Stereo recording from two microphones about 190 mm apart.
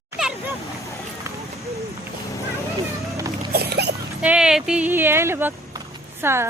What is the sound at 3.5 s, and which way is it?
Boat, 60° right (ahead or behind).